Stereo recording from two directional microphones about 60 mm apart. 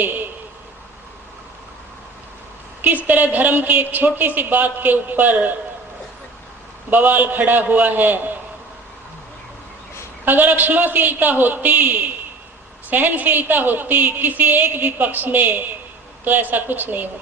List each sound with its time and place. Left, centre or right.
2.8 s a woman's voice: right
6.9 s a man's voice: right
10.2 s a woman's voice: right